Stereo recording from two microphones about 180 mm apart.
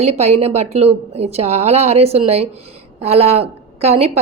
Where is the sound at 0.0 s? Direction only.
40° right (ahead or behind).